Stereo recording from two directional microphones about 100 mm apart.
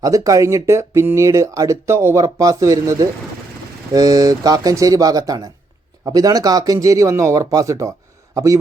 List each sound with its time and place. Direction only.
0.0 s speech: 35° right (ahead or behind)